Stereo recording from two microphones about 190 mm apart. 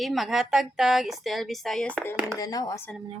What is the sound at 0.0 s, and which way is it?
A woman's voice, centre (ahead or behind).